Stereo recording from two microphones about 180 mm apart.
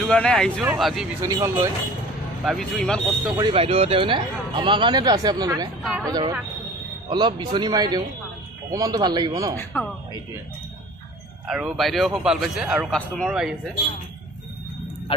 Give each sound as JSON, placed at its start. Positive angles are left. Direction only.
{"t": 0.0, "sound": "a man's voice", "side_deg": 5}
{"t": 1.2, "sound": "speech", "side_deg": -15}
{"t": 2.4, "sound": "a man's voice", "side_deg": 5}
{"t": 3.3, "sound": "speech", "side_deg": -25}
{"t": 11.4, "sound": "a man's voice", "side_deg": 0}
{"t": 15.1, "sound": "music", "side_deg": 30}